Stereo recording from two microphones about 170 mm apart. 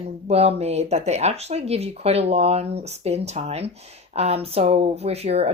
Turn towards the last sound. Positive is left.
turn(degrees=-35)  # may be behind; listen again after turning